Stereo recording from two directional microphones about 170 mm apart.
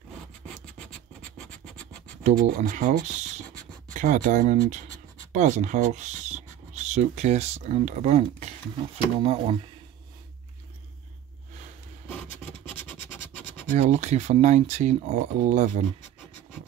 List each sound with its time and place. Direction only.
0.7 s scratch: 5° left (ahead or behind)
2.2 s speech: 45° right (ahead or behind)
13.7 s speech: 45° right (ahead or behind)